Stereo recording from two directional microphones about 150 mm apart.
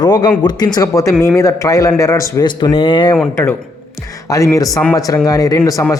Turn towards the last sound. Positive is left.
turn(degrees=20)  # may be behind; listen again after turning